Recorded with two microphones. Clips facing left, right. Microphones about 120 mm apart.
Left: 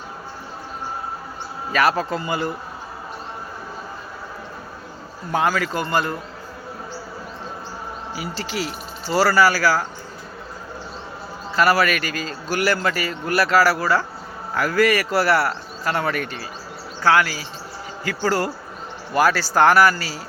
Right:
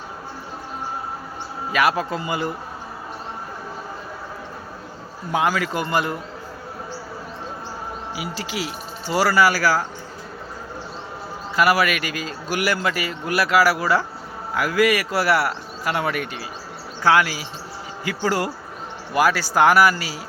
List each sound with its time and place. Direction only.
1.7 s a man's voice: 10° right (ahead or behind)
5.3 s a man's voice: 15° right (ahead or behind)
8.1 s a man's voice: 10° right (ahead or behind)
11.5 s a man's voice: 15° right (ahead or behind)